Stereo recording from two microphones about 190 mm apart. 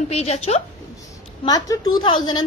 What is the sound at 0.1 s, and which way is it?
Speech, 35° left (ahead or behind).